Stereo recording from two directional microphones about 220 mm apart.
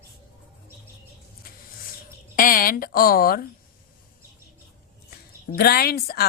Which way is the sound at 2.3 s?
40° left (ahead or behind).